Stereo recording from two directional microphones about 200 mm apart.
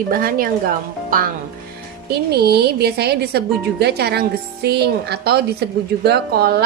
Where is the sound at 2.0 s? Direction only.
55° right (ahead or behind).